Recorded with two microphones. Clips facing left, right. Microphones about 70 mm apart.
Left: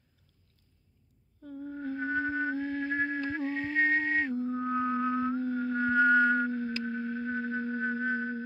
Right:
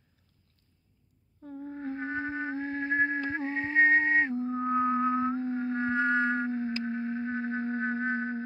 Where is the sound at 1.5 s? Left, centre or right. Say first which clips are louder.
Even; right.